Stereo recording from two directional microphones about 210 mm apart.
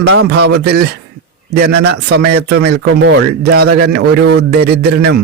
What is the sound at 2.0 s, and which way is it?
Speech, 50° right (ahead or behind).